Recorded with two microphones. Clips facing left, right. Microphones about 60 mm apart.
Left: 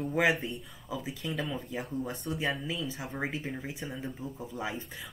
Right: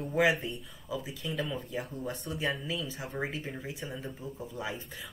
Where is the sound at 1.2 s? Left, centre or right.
Left.